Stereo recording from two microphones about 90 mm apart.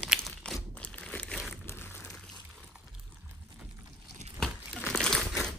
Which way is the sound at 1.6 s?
25° left (ahead or behind).